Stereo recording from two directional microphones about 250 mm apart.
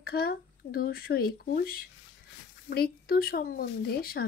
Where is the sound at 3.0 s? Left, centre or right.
Left.